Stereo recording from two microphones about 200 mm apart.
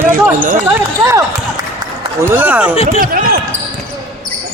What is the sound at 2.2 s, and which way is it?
Speech, 10° right (ahead or behind).